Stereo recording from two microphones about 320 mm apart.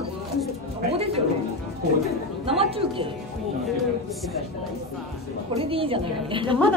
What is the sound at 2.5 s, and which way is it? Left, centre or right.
Speech, centre.